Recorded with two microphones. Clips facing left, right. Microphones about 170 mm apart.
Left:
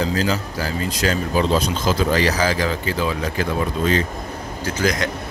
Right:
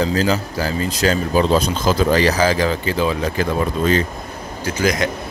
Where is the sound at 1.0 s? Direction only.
30° right (ahead or behind).